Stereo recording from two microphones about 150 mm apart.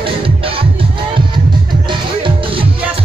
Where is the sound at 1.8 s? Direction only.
35° right (ahead or behind).